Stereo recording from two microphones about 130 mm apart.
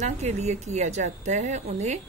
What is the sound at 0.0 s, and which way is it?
A woman's voice, 60° right (ahead or behind).